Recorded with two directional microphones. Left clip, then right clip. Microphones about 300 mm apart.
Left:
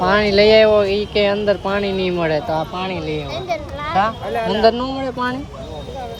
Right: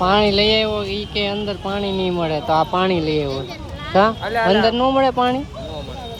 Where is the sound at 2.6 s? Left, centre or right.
Centre.